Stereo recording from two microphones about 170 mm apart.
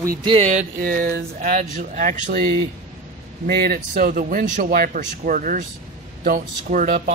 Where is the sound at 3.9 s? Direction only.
55° right (ahead or behind).